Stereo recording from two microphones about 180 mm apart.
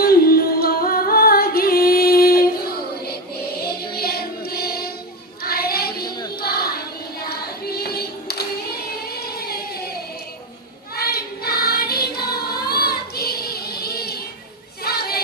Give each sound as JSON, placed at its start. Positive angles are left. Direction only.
{"t": 0.0, "sound": "music", "side_deg": 55}
{"t": 3.9, "sound": "music", "side_deg": 60}
{"t": 5.4, "sound": "child singing", "side_deg": 60}
{"t": 7.3, "sound": "music", "side_deg": 60}
{"t": 10.9, "sound": "singing", "side_deg": 60}
{"t": 14.8, "sound": "child singing", "side_deg": 60}